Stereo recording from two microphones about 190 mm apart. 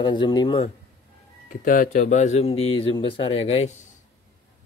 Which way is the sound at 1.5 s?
45° left (ahead or behind).